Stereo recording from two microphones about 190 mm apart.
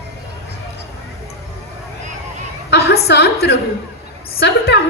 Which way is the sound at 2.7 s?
60° left (ahead or behind).